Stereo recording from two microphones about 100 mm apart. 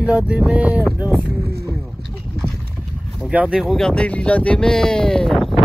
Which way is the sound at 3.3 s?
15° right (ahead or behind).